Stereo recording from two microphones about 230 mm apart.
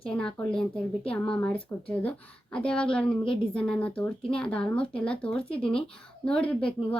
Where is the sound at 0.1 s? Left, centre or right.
Centre.